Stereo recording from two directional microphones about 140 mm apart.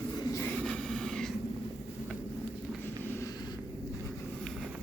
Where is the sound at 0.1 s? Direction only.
30° left (ahead or behind).